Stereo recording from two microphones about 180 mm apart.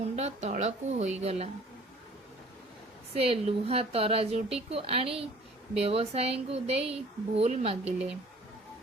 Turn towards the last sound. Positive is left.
turn(degrees=-35)  # may be behind; listen again after turning